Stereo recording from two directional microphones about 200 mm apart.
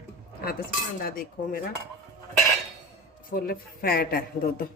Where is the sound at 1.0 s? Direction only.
45° left (ahead or behind).